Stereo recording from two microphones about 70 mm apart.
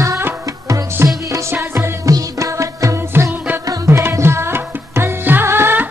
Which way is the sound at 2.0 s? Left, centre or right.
Right.